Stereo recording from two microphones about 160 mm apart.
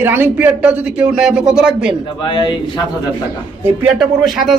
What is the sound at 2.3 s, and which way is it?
Speech, 30° left (ahead or behind).